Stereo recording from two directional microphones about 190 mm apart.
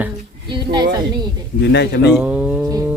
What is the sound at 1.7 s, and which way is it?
Speech, 60° left (ahead or behind).